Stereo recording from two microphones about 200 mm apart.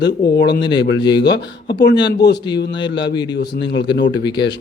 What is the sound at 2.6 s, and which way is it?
Speech, 60° left (ahead or behind).